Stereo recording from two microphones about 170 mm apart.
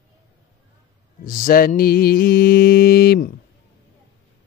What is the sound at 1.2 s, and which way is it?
Mantra, 55° left (ahead or behind).